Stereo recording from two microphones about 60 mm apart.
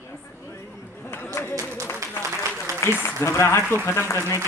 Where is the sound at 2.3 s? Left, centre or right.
Right.